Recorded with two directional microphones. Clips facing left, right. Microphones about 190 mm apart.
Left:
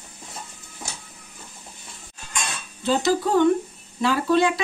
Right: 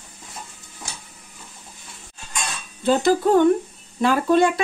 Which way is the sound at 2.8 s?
50° right (ahead or behind).